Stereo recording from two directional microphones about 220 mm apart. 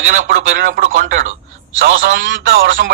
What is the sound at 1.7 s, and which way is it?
Speech, 60° right (ahead or behind).